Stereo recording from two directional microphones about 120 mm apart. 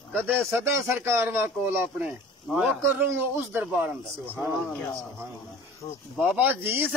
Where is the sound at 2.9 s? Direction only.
15° right (ahead or behind).